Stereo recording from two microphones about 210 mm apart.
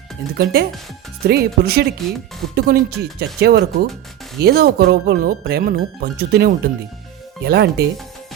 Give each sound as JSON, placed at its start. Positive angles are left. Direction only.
{"t": 0.3, "sound": "speech", "side_deg": -50}